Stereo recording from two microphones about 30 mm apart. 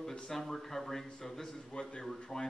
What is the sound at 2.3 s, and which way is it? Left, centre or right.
Speech, centre.